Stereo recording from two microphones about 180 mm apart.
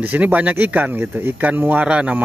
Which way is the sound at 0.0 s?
10° right (ahead or behind).